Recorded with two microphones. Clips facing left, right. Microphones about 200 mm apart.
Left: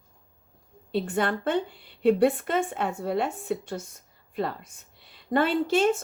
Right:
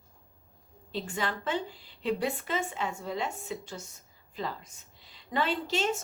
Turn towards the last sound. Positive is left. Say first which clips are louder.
# left 8 dB
turn(degrees=55)  # may be behind; listen again after turning